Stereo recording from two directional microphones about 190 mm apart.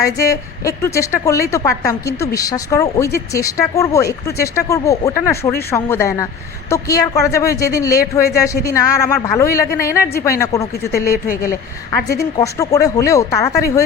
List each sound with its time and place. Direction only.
0.0 s a woman's voice: 15° left (ahead or behind)
12.1 s a woman's voice: 15° left (ahead or behind)